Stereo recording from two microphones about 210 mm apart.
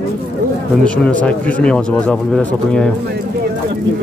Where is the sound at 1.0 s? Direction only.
5° left (ahead or behind).